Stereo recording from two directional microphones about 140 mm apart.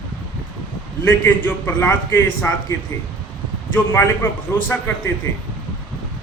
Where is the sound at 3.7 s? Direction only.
15° left (ahead or behind).